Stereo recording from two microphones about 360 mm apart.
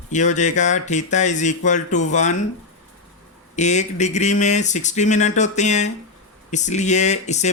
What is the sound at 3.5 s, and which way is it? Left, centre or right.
Speech, centre.